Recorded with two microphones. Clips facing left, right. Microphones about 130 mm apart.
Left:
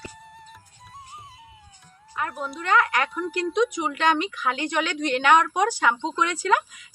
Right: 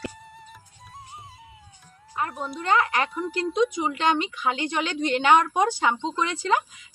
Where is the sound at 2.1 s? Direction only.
25° right (ahead or behind).